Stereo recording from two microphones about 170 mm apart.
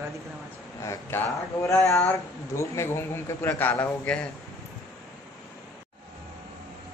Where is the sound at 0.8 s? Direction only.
15° left (ahead or behind).